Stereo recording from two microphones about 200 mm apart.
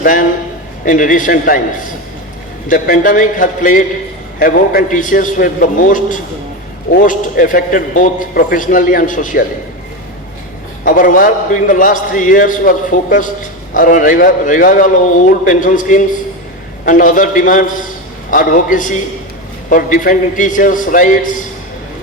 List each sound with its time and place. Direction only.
0.0 s a sound: 45° left (ahead or behind)
0.9 s a man's voice: 40° left (ahead or behind)
2.6 s a man's voice: 40° left (ahead or behind)
10.8 s a man's voice: 45° left (ahead or behind)